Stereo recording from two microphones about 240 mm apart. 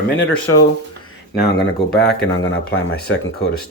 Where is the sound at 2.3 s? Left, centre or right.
Left.